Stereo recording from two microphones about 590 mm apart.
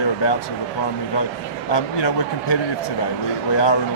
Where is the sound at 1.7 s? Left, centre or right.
Left.